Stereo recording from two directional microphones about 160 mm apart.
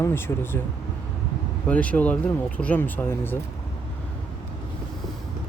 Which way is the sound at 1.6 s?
10° left (ahead or behind).